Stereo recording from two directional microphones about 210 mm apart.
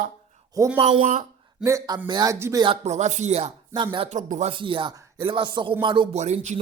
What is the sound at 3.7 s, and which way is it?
Speech, 20° right (ahead or behind).